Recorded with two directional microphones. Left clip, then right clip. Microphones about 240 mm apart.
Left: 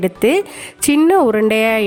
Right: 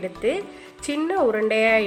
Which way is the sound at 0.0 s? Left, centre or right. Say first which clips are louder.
Left 10 dB; left.